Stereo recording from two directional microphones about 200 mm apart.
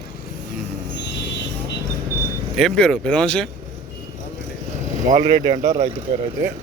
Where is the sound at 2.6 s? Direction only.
Centre (ahead or behind).